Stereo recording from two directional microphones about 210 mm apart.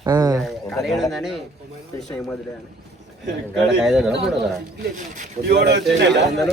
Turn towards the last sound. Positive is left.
turn(degrees=-55)  # may be behind; listen again after turning